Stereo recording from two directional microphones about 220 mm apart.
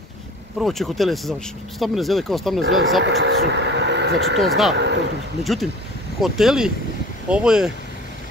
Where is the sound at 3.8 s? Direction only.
50° right (ahead or behind).